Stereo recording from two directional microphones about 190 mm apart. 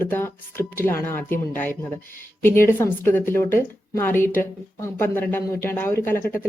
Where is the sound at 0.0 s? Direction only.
10° left (ahead or behind).